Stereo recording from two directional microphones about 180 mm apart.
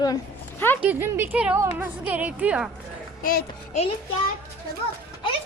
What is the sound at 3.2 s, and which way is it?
Speech, 55° left (ahead or behind).